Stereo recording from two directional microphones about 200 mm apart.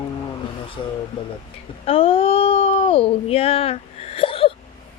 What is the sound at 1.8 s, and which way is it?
Speech, 30° left (ahead or behind).